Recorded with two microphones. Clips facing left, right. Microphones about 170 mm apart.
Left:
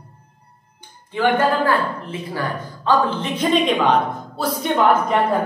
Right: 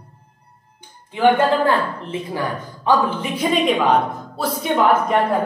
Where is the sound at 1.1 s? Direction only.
20° right (ahead or behind).